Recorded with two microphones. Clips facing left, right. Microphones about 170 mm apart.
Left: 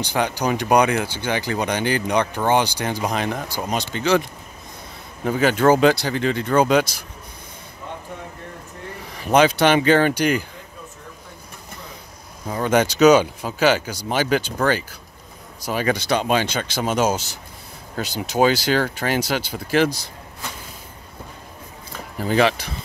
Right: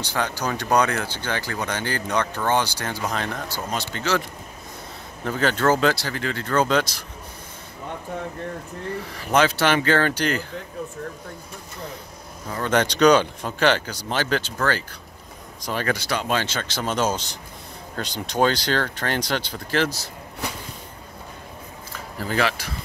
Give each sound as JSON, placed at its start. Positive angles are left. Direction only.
{"t": 0.0, "sound": "speech", "side_deg": 15}
{"t": 5.2, "sound": "speech", "side_deg": 10}
{"t": 9.1, "sound": "speech", "side_deg": 15}
{"t": 12.4, "sound": "speech", "side_deg": 10}
{"t": 22.2, "sound": "speech", "side_deg": 20}